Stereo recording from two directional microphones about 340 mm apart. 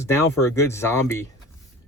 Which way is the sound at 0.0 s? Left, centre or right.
Centre.